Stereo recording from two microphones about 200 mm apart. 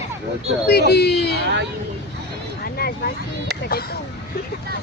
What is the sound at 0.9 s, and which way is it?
Speech, 55° left (ahead or behind).